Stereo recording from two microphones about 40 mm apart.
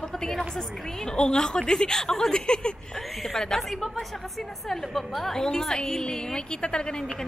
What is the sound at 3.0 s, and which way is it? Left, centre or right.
A woman's voice, centre.